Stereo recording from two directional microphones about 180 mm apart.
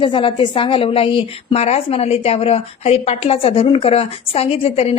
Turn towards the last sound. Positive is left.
turn(degrees=35)  # may be behind; listen again after turning